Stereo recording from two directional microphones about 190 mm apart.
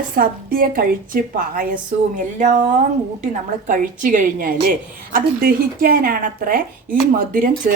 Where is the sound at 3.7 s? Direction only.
45° right (ahead or behind).